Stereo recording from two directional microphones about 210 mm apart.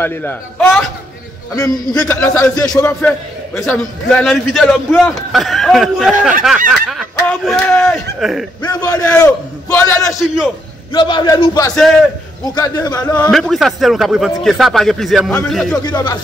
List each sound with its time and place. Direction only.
0.0 s a man's voice: 10° left (ahead or behind)
1.5 s a man's voice: 15° left (ahead or behind)
2.0 s a man's voice: 5° left (ahead or behind)
6.7 s fowl: centre (ahead or behind)
8.2 s a man's voice: centre (ahead or behind)
8.6 s a man's voice: 20° left (ahead or behind)
10.2 s a man's voice: centre (ahead or behind)
10.9 s a man's voice: 20° left (ahead or behind)
11.7 s a man's voice: centre (ahead or behind)
12.4 s a man's voice: 15° left (ahead or behind)
15.8 s a man's voice: 20° left (ahead or behind)